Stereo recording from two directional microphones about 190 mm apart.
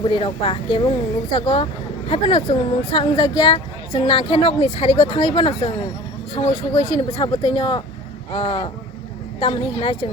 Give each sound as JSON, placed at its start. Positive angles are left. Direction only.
{"t": 0.0, "sound": "speech", "side_deg": 25}